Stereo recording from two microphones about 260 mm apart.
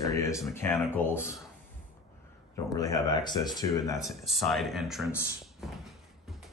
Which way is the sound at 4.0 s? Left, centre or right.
Centre.